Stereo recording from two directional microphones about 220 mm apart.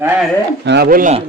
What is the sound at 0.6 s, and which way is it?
Speech, 50° right (ahead or behind).